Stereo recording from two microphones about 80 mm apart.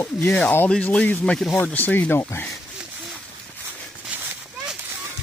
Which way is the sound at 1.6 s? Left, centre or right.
Left.